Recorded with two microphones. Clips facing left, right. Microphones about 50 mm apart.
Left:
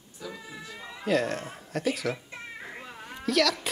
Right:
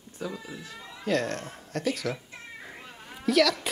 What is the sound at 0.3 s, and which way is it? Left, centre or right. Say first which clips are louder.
Speech: right 1 dB; centre.